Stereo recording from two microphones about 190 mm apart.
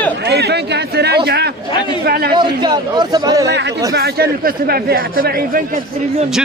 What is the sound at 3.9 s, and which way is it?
Speech, 55° right (ahead or behind).